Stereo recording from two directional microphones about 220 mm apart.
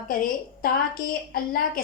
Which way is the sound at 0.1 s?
40° left (ahead or behind).